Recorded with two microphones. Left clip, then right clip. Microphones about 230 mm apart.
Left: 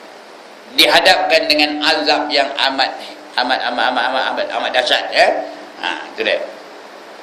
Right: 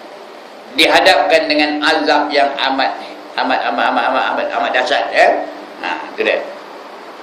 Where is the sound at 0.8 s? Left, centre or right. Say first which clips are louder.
Right 1 dB; left.